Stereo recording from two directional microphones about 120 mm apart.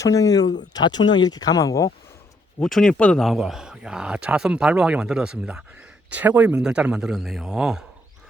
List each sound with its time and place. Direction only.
0.0 s speech: 30° left (ahead or behind)
2.6 s a man's voice: 5° left (ahead or behind)